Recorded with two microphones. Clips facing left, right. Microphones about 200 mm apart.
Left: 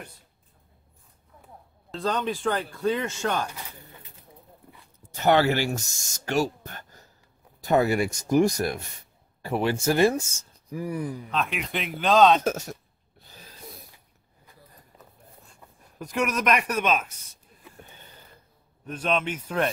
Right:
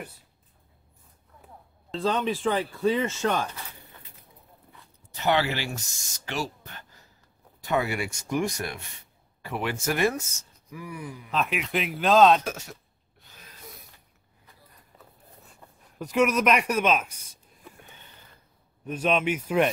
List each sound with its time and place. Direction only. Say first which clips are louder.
1.9 s speech: right 1 dB; centre (ahead or behind)
5.1 s speech: left 4 dB; 45° left (ahead or behind)
11.2 s speech: right 1 dB; 5° right (ahead or behind)
12.4 s speech: left 7 dB; 45° left (ahead or behind)
13.3 s a sound: left 3 dB; 35° left (ahead or behind)
16.1 s speech: right 3 dB; 5° right (ahead or behind)
18.9 s speech: right 2 dB; 10° right (ahead or behind)